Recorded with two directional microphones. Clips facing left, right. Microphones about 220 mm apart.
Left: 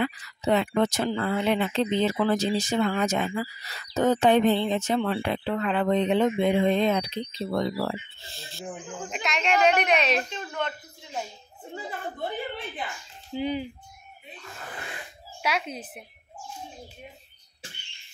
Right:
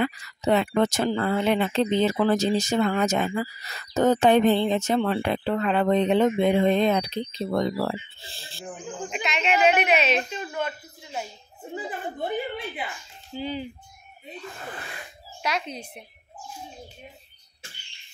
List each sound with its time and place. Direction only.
0.0 s speech: 50° right (ahead or behind); by 8.6 s 30° right (ahead or behind)
9.1 s a woman's voice: centre (ahead or behind)
13.4 s speech: 15° left (ahead or behind)
15.4 s speech: 5° left (ahead or behind)